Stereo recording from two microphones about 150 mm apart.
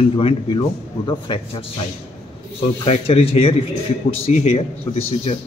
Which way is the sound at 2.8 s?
40° left (ahead or behind).